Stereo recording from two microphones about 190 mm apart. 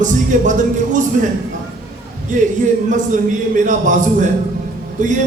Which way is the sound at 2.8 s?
40° right (ahead or behind).